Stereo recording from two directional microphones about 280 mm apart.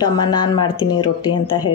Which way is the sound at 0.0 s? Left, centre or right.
Centre.